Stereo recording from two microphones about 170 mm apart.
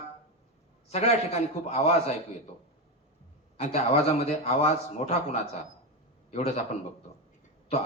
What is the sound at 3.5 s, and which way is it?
A man's voice, 40° left (ahead or behind).